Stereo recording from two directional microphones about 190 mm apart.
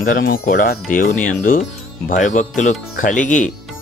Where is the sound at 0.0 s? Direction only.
45° left (ahead or behind).